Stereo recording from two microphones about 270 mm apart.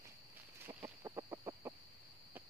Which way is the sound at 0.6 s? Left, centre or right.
Centre.